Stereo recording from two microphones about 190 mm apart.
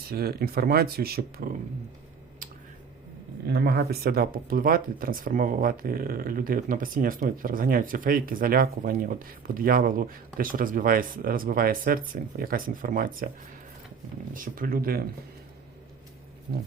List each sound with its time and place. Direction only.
0.1 s speech: 55° right (ahead or behind)
3.5 s speech: 55° right (ahead or behind)
14.3 s speech: 45° right (ahead or behind)